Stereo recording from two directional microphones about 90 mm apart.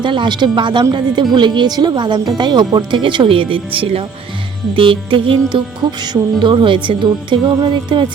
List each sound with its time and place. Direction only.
0.0 s speech: 60° right (ahead or behind); by 4.0 s 80° right
4.7 s music: 75° right (ahead or behind)
6.4 s speech: 60° right (ahead or behind)